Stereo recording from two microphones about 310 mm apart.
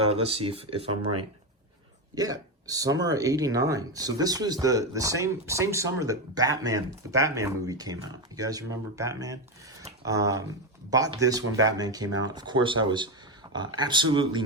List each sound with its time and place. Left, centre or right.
0.0 s speech: centre
2.1 s speech: centre